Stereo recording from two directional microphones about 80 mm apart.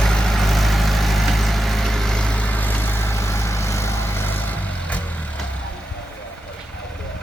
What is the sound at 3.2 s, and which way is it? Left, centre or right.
Vehicle, left.